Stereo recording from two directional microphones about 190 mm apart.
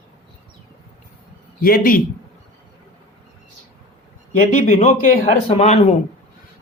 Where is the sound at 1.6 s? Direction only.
50° left (ahead or behind).